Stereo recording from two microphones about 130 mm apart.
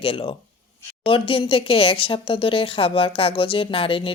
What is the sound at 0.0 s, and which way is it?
A woman's voice, 45° left (ahead or behind).